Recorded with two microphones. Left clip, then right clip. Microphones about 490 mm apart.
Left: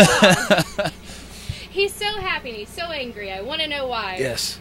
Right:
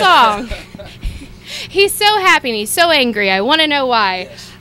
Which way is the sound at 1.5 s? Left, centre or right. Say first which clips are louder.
Right 9 dB; right.